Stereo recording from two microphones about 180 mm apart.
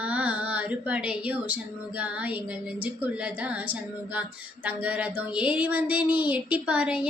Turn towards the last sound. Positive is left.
turn(degrees=-5)  # may be behind; listen again after turning